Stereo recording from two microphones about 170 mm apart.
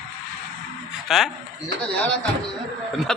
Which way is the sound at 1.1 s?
Centre (ahead or behind).